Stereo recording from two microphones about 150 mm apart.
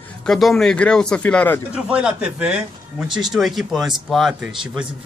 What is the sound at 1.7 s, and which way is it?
Speech, 5° right (ahead or behind).